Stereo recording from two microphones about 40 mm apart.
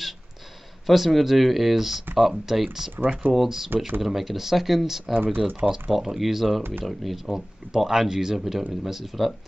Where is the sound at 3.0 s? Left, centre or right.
Right.